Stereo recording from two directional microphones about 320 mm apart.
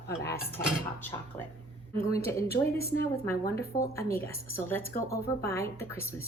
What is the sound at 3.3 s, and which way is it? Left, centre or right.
Cutlery, centre.